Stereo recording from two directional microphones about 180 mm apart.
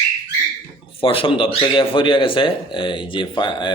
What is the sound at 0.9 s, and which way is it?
Speech, 30° left (ahead or behind).